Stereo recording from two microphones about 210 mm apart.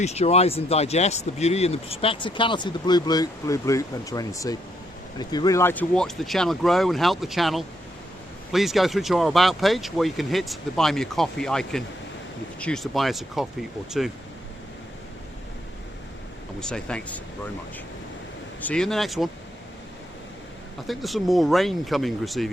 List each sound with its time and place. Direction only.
0.0 s speech: 30° left (ahead or behind); by 14.1 s centre (ahead or behind)
16.6 s speech: 5° left (ahead or behind)
18.7 s speech: 5° left (ahead or behind)
20.8 s speech: centre (ahead or behind)